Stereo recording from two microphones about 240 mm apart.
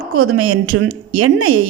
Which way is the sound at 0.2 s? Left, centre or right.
Right.